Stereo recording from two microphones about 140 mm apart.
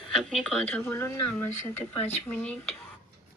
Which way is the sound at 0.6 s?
15° left (ahead or behind).